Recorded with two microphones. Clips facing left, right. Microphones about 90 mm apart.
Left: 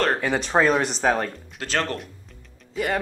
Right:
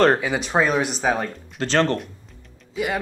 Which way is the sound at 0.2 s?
5° right (ahead or behind).